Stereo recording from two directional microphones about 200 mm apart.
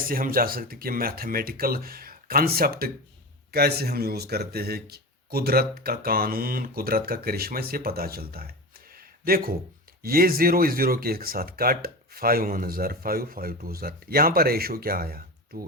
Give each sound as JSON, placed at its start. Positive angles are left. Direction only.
{"t": 0.0, "sound": "speech", "side_deg": -45}
{"t": 9.0, "sound": "a sound", "side_deg": -50}
{"t": 10.0, "sound": "speech", "side_deg": -50}